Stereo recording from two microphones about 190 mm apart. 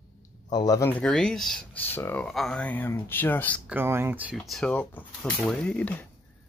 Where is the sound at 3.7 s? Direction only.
10° right (ahead or behind).